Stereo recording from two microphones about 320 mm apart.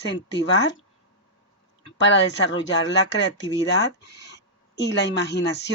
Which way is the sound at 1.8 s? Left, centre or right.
Left.